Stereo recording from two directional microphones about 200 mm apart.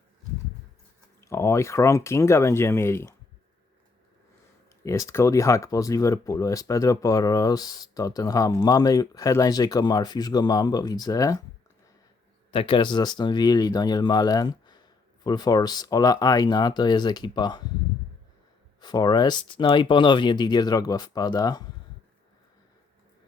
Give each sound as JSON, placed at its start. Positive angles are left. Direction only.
{"t": 1.2, "sound": "speech", "side_deg": 15}
{"t": 4.8, "sound": "speech", "side_deg": 15}
{"t": 12.5, "sound": "speech", "side_deg": 25}
{"t": 18.8, "sound": "speech", "side_deg": 20}